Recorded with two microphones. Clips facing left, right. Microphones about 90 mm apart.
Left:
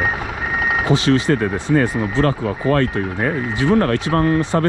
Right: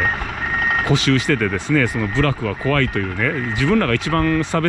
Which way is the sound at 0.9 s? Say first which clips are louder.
Left 3 dB; 20° left (ahead or behind).